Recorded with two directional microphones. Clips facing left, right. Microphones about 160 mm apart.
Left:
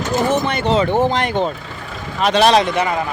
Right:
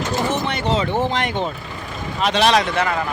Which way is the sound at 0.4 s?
50° left (ahead or behind).